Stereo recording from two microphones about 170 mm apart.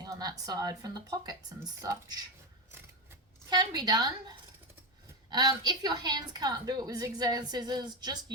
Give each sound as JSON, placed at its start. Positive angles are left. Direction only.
{"t": 0.0, "sound": "a woman's voice", "side_deg": -20}